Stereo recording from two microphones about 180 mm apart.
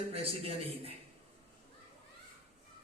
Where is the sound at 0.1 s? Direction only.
35° right (ahead or behind).